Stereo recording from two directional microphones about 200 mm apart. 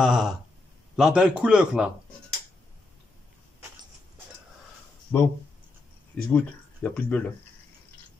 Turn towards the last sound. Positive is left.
turn(degrees=5)  # may be behind; listen again after turning